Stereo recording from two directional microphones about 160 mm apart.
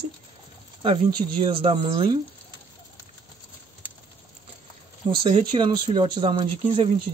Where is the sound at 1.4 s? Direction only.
35° right (ahead or behind).